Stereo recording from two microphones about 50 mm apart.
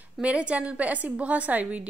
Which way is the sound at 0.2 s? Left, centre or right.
Right.